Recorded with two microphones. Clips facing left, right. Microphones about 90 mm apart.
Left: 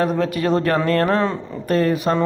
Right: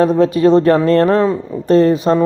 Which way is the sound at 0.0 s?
25° right (ahead or behind).